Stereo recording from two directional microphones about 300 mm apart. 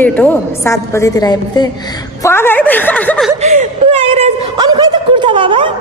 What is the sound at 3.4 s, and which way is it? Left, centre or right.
Speech, right.